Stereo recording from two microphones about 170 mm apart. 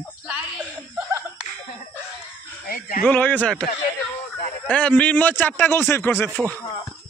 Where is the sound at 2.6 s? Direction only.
55° left (ahead or behind).